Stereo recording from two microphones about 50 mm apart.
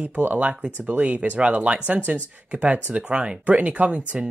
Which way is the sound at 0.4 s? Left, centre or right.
Right.